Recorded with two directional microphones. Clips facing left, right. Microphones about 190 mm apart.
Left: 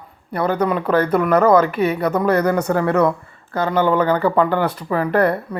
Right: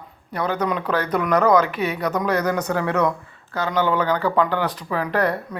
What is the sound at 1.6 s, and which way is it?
Speech, 50° left (ahead or behind).